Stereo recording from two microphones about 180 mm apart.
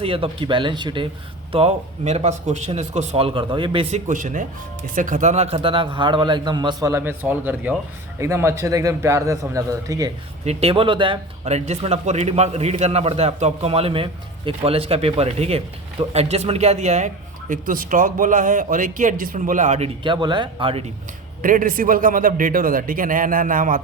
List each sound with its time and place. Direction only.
0.0 s a man's voice: 30° right (ahead or behind)
1.5 s speech: 35° right (ahead or behind)
4.1 s a man's voice: 45° right (ahead or behind); by 10.1 s 20° right (ahead or behind)
10.4 s a man's voice: 35° right (ahead or behind)
20.1 s a man's voice: 25° right (ahead or behind)
21.4 s a man's voice: 50° right (ahead or behind)